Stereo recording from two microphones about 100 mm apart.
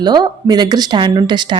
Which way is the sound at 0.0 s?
45° right (ahead or behind).